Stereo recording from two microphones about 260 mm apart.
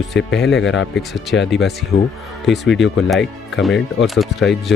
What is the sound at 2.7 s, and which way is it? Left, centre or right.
Speech, left.